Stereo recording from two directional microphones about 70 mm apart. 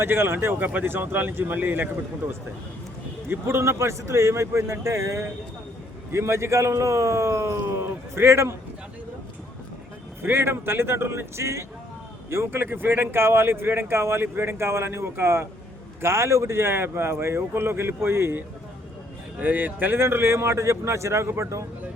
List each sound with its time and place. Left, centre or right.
0.0 s speech: right
3.2 s speech: right
10.2 s speech: right